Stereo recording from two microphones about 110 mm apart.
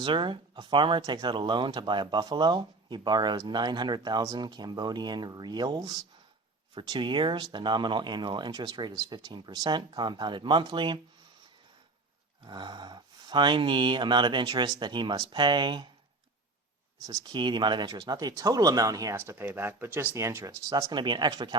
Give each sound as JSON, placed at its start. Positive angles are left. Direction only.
{"t": 0.0, "sound": "speech", "side_deg": -50}
{"t": 12.5, "sound": "speech", "side_deg": -45}
{"t": 17.1, "sound": "speech", "side_deg": -40}
{"t": 19.1, "sound": "speech", "side_deg": -20}
{"t": 20.9, "sound": "speech", "side_deg": -45}